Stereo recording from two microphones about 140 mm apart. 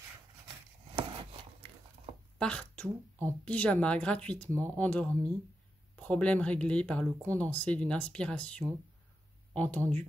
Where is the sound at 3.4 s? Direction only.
10° left (ahead or behind).